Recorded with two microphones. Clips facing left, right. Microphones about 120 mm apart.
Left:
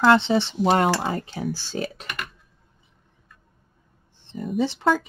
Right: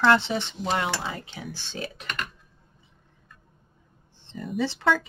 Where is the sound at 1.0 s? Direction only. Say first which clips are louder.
Left 8 dB; 40° left (ahead or behind).